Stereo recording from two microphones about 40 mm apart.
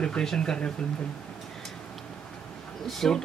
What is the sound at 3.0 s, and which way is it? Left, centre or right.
Speech, centre.